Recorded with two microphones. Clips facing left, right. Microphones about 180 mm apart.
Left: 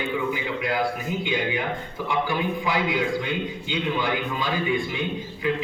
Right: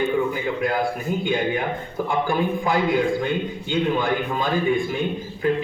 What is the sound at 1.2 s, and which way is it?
A man's voice, 50° right (ahead or behind).